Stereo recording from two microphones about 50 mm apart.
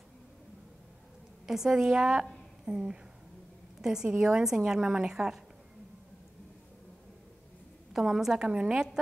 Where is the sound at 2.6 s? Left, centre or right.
Centre.